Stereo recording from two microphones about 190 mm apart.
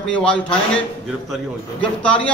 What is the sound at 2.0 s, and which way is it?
Speech, 5° left (ahead or behind).